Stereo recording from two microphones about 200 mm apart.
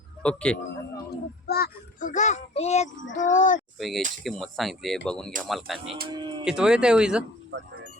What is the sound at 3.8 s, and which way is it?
Speech, centre (ahead or behind).